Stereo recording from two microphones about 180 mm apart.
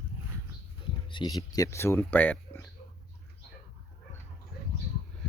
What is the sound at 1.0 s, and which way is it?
Speech, 25° left (ahead or behind).